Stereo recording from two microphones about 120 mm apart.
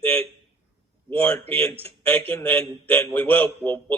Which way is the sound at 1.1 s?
15° left (ahead or behind).